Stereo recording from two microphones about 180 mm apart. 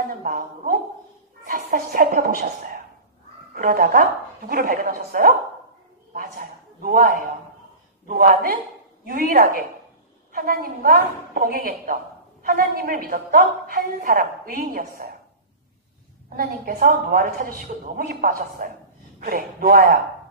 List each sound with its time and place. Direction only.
0.1 s a sound: 50° right (ahead or behind)
1.5 s a woman's voice: 50° right (ahead or behind)
16.3 s a woman's voice: 55° right (ahead or behind)